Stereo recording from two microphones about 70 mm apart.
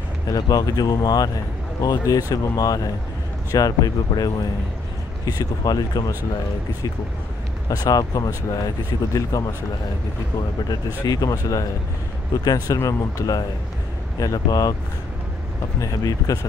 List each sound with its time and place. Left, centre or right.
0.3 s speech: left
7.7 s speech: left
11.1 s speech: left
15.8 s speech: left